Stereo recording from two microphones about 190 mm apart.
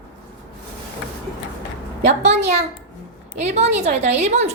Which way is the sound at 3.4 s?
35° right (ahead or behind).